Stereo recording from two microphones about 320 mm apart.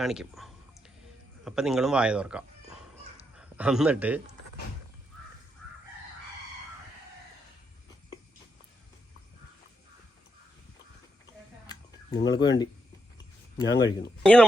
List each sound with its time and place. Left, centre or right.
0.0 s a sound: centre
1.5 s a man's voice: centre
12.2 s speech: centre
13.7 s speech: left
14.2 s speech: centre